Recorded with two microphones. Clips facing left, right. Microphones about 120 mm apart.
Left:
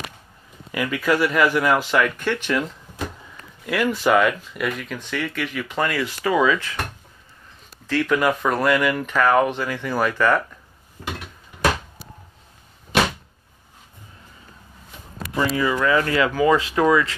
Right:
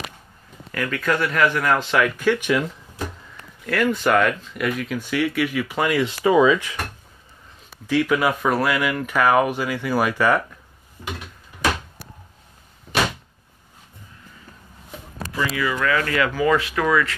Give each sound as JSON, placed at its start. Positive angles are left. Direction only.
{"t": 0.7, "sound": "speech", "side_deg": 10}
{"t": 3.6, "sound": "speech", "side_deg": 5}
{"t": 7.8, "sound": "speech", "side_deg": -10}
{"t": 15.3, "sound": "speech", "side_deg": 30}
{"t": 15.7, "sound": "speech", "side_deg": 20}